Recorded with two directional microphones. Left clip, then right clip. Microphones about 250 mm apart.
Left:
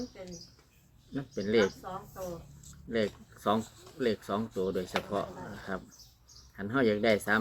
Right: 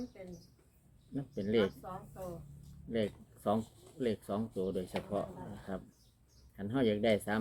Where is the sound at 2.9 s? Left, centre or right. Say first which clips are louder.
Left 4 dB; centre.